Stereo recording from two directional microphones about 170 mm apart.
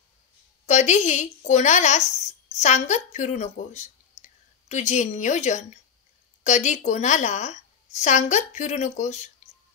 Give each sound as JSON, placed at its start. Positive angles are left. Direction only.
{"t": 0.7, "sound": "a woman's voice", "side_deg": 45}